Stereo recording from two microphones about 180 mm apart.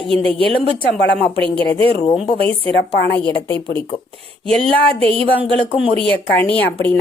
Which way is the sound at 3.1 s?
10° left (ahead or behind).